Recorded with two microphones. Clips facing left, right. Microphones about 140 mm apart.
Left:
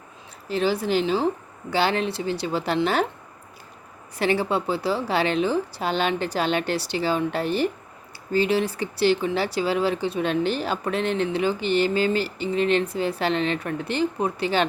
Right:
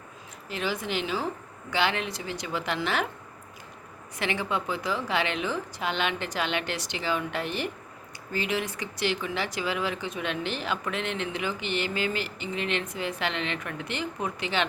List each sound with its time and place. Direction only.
0.4 s speech: 35° left (ahead or behind)
4.2 s speech: 35° left (ahead or behind)